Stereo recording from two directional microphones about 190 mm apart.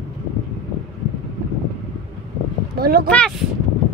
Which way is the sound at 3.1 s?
5° left (ahead or behind).